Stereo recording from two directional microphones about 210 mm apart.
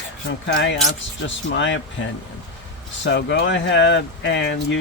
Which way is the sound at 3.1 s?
55° left (ahead or behind).